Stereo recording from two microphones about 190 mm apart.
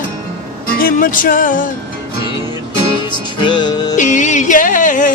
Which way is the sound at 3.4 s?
25° left (ahead or behind).